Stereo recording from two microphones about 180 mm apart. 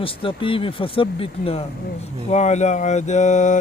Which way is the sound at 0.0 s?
30° left (ahead or behind).